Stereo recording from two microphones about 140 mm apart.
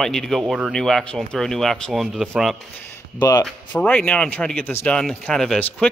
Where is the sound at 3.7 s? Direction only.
10° left (ahead or behind).